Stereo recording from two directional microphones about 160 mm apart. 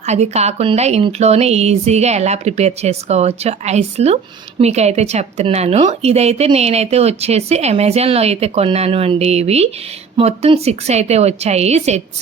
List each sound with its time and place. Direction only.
0.0 s a woman's voice: 45° right (ahead or behind)